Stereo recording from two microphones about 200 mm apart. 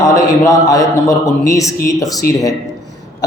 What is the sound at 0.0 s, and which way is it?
A man's voice, 15° left (ahead or behind).